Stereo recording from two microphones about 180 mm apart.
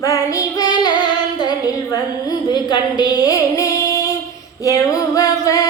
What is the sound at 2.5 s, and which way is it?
A woman's voice, 25° left (ahead or behind).